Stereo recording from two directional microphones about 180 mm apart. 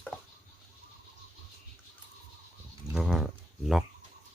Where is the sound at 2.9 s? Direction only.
Centre (ahead or behind).